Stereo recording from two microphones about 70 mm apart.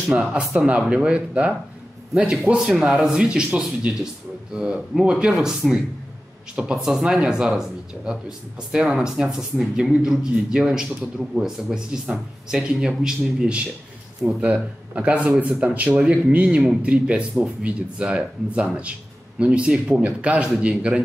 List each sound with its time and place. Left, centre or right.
0.1 s speech: centre
6.6 s speech: centre
15.0 s speech: centre